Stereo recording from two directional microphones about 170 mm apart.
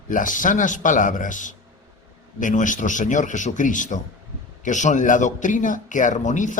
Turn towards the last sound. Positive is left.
turn(degrees=45)  # may be behind; listen again after turning